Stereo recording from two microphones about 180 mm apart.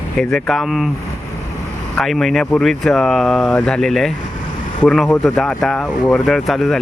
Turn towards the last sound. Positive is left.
turn(degrees=0)  # may be behind; listen again after turning